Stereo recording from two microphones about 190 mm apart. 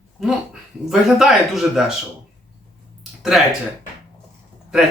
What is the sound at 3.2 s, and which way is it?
Speech, centre (ahead or behind).